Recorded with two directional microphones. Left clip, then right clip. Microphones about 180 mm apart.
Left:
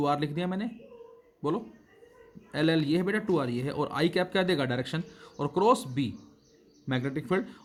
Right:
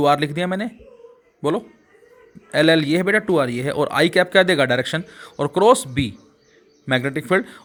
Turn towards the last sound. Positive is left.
turn(degrees=-30)  # may be behind; listen again after turning